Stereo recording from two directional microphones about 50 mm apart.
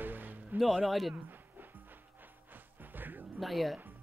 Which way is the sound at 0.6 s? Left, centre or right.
Centre.